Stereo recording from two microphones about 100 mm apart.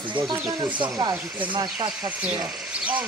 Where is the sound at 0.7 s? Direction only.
15° right (ahead or behind).